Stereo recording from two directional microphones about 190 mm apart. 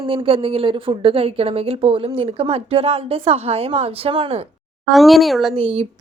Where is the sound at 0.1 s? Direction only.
30° right (ahead or behind).